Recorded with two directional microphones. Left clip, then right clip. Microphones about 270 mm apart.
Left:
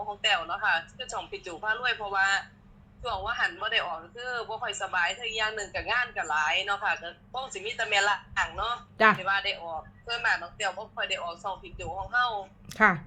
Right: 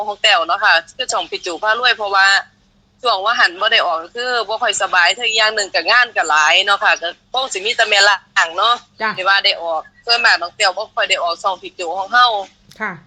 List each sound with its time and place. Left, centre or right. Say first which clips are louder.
0.0 s speech: right 13 dB; right
12.7 s speech: left 3 dB; centre